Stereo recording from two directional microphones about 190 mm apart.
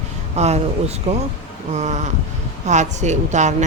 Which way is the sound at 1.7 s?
35° right (ahead or behind).